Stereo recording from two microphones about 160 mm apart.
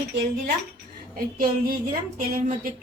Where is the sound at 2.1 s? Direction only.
50° right (ahead or behind).